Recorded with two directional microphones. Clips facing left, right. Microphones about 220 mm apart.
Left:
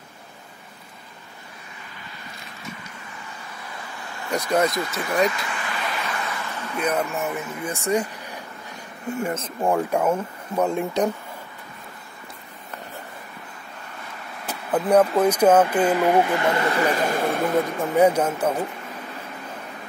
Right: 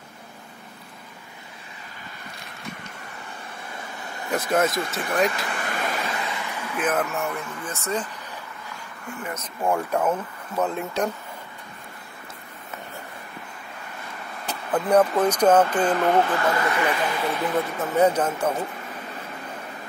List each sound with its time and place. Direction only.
4.5 s speech: 5° right (ahead or behind)
5.5 s vehicle: 45° right (ahead or behind)
6.2 s a sound: 15° right (ahead or behind); by 7.4 s centre (ahead or behind)
7.6 s speech: 15° left (ahead or behind)
9.0 s speech: 30° left (ahead or behind)
9.6 s speech: 15° left (ahead or behind)
14.7 s speech: 10° left (ahead or behind)
16.4 s speech: 25° left (ahead or behind); by 17.5 s 50° left (ahead or behind)
17.7 s speech: 10° left (ahead or behind)